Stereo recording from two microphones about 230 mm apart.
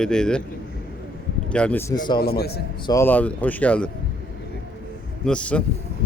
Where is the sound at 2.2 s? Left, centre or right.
Left.